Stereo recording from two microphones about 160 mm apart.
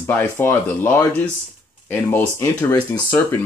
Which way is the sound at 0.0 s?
10° left (ahead or behind).